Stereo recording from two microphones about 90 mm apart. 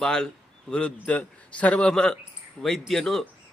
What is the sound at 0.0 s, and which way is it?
A man's voice, 10° left (ahead or behind).